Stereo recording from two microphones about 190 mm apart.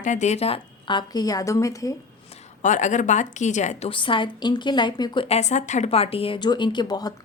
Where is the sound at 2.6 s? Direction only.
40° left (ahead or behind); by 5.2 s 25° left (ahead or behind).